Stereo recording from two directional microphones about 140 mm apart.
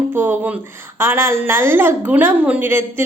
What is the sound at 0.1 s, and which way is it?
Speech, 15° right (ahead or behind).